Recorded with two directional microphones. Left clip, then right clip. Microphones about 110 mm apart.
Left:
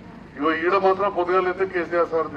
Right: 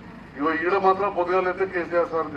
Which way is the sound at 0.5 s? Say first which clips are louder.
Left 1 dB; 30° left (ahead or behind).